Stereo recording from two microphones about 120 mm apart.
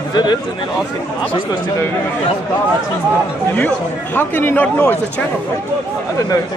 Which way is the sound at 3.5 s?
15° left (ahead or behind).